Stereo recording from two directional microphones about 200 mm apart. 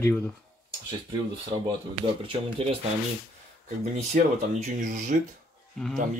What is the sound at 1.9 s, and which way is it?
Speech, 30° right (ahead or behind).